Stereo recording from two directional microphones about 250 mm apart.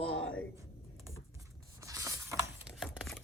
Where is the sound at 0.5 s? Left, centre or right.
Centre.